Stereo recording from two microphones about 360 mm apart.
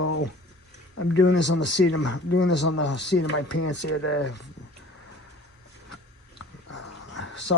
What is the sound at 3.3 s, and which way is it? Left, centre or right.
Speech, left.